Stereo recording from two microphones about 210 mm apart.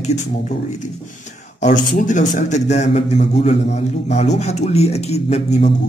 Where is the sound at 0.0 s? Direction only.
35° left (ahead or behind).